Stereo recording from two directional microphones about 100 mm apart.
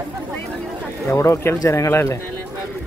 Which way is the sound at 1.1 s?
25° left (ahead or behind).